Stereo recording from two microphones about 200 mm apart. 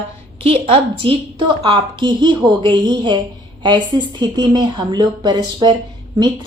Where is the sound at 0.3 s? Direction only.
25° right (ahead or behind).